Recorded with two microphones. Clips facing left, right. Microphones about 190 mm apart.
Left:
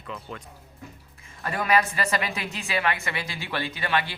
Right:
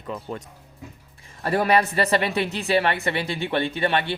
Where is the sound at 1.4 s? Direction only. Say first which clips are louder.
Right 4 dB; 35° right (ahead or behind).